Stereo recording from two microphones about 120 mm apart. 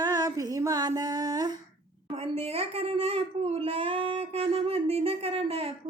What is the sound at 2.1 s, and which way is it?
A woman's voice, 55° right (ahead or behind).